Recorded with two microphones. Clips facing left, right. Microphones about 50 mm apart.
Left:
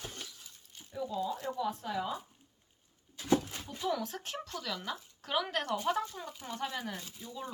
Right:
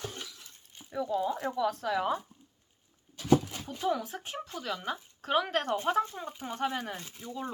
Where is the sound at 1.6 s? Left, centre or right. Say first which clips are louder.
Right 6 dB; right.